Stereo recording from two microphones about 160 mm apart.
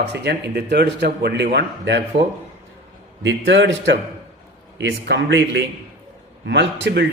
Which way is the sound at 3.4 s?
90° right.